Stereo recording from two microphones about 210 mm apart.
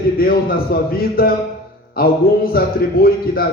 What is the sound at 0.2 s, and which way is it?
A man's voice, 45° left (ahead or behind).